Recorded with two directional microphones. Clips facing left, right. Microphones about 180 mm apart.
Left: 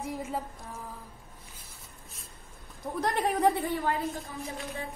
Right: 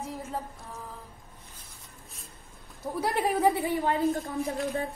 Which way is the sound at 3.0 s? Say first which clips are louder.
Right 1 dB; 5° right (ahead or behind).